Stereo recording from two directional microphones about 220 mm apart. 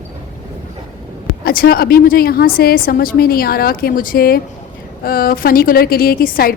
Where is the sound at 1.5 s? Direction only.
45° left (ahead or behind).